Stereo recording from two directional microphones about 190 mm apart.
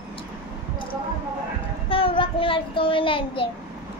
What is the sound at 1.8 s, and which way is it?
A child's voice, 30° left (ahead or behind).